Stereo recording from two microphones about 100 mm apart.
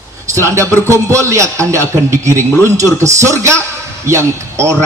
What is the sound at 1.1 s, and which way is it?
A man's voice, 30° right (ahead or behind).